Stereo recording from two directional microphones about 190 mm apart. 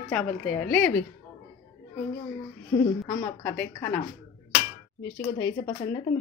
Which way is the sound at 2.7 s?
20° left (ahead or behind).